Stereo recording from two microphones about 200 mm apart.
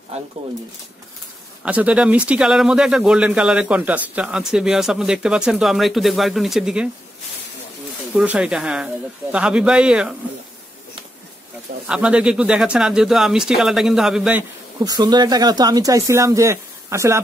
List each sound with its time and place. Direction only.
1.6 s speech: 5° right (ahead or behind)
8.1 s speech: 5° right (ahead or behind)
11.9 s speech: 5° right (ahead or behind)
14.8 s speech: 20° right (ahead or behind)